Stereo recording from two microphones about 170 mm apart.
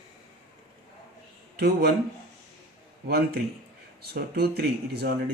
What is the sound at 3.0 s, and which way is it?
Speech, 65° right (ahead or behind).